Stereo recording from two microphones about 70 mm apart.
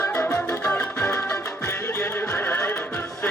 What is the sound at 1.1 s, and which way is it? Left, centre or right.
Music, left.